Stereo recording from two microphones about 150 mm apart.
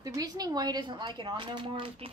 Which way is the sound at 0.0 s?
25° right (ahead or behind).